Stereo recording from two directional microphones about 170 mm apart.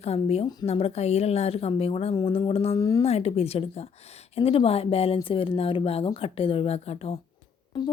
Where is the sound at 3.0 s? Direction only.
35° left (ahead or behind).